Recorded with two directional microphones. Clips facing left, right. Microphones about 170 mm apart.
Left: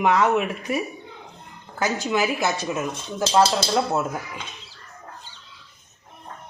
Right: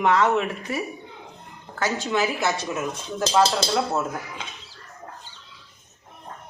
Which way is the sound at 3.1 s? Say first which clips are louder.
Left 1 dB; 5° left (ahead or behind).